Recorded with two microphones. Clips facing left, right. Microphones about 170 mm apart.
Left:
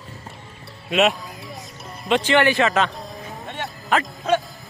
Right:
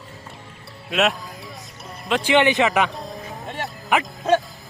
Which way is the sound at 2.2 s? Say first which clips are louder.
Right 1 dB; 15° right (ahead or behind).